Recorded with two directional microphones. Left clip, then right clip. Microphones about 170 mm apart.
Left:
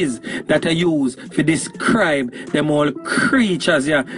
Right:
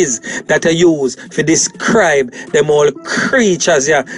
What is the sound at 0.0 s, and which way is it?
Speech, 50° right (ahead or behind).